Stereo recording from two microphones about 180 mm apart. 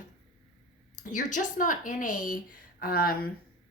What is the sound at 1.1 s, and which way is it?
A woman's voice, 45° left (ahead or behind).